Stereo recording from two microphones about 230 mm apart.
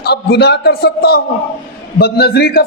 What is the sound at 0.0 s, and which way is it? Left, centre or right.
A man's voice, left.